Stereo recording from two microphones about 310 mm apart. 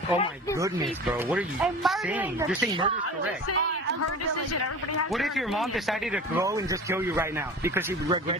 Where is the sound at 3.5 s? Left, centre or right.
Left.